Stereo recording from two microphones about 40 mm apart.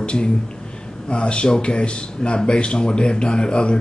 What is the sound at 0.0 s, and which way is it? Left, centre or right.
Speech, left.